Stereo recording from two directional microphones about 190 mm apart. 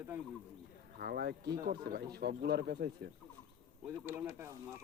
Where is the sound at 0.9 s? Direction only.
55° right (ahead or behind).